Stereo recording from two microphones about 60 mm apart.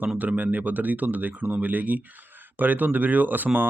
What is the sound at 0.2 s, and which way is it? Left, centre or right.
Speech, right.